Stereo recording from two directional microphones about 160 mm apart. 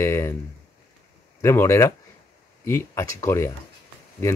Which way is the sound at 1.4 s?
15° left (ahead or behind).